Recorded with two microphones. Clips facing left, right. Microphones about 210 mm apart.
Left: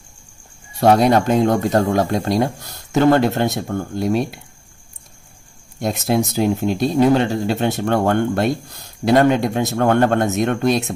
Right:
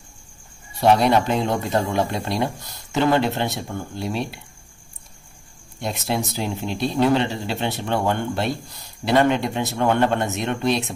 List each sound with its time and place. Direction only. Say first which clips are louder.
0.7 s speech: left 3 dB; 45° left (ahead or behind)
5.8 s speech: left 6 dB; 45° left (ahead or behind)